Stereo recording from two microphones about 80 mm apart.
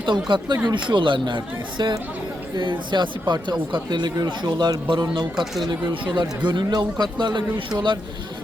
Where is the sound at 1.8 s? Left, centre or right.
Right.